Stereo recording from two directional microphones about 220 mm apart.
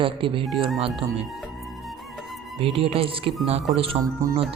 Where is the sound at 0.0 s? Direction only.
25° right (ahead or behind).